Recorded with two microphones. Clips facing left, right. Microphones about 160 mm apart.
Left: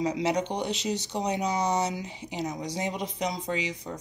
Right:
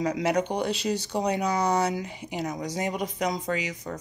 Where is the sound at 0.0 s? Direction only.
55° right (ahead or behind).